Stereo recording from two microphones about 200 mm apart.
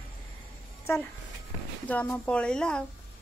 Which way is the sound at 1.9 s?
5° left (ahead or behind).